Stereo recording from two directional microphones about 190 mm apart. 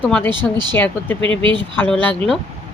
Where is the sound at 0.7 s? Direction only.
10° left (ahead or behind).